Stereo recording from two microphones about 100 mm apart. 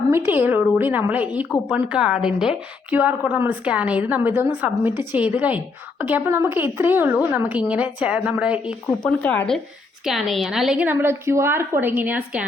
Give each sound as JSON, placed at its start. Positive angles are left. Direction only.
{"t": 0.1, "sound": "a woman's voice", "side_deg": -20}
{"t": 9.0, "sound": "speech", "side_deg": 15}
{"t": 10.1, "sound": "a woman's voice", "side_deg": 0}
{"t": 10.8, "sound": "a woman's voice", "side_deg": -25}